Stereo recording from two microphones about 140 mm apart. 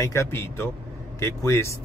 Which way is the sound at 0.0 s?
20° left (ahead or behind).